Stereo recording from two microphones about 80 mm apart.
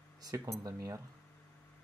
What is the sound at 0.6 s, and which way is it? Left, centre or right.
Speech, right.